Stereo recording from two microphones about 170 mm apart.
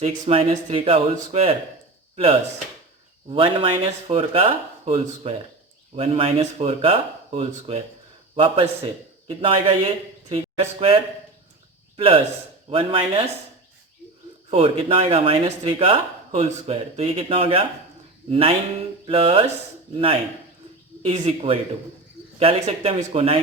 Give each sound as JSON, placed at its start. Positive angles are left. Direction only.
{"t": 0.0, "sound": "speech", "side_deg": -35}
{"t": 3.2, "sound": "a man's voice", "side_deg": -30}
{"t": 14.5, "sound": "speech", "side_deg": -35}
{"t": 21.0, "sound": "speech", "side_deg": -35}